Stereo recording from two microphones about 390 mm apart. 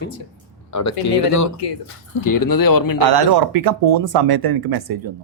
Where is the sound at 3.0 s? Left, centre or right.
Right.